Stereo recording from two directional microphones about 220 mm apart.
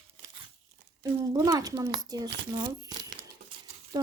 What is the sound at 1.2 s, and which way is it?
Speech, 15° right (ahead or behind).